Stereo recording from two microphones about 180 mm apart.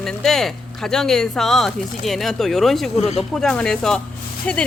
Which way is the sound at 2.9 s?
40° left (ahead or behind).